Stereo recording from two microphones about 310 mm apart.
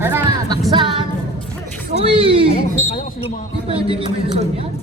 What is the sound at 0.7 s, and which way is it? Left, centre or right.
Music, centre.